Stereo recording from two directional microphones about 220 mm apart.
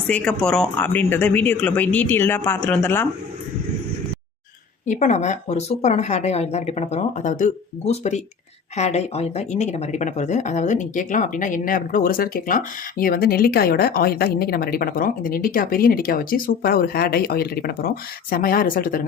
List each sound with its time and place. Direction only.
0.1 s speech: 5° left (ahead or behind)
4.9 s speech: 35° left (ahead or behind)